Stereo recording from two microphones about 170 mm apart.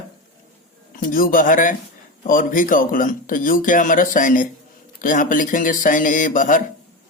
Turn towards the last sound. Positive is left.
turn(degrees=50)  # may be behind; listen again after turning